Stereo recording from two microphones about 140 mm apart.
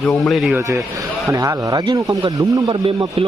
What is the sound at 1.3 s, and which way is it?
Speech, 25° right (ahead or behind).